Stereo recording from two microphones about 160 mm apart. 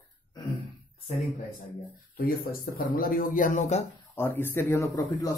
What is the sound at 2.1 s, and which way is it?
Speech, 65° left (ahead or behind).